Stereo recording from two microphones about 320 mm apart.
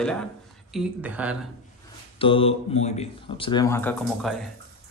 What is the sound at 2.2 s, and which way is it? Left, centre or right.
A man's voice, centre.